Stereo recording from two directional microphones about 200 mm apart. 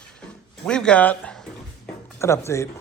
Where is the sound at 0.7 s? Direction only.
5° left (ahead or behind).